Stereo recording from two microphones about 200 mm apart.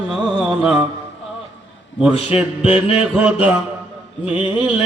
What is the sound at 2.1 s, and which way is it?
Mantra, 30° left (ahead or behind).